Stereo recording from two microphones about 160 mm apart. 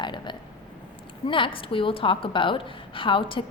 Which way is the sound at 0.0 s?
30° left (ahead or behind).